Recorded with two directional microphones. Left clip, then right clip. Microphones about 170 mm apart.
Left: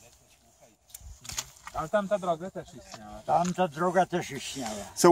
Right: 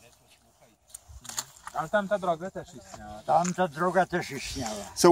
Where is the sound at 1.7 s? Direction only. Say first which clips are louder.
Right 1 dB; 30° left (ahead or behind).